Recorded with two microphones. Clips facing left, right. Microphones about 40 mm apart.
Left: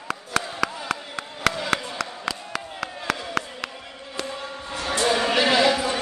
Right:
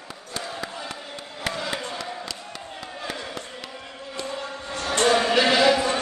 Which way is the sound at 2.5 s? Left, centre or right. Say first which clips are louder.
Left 5 dB; left.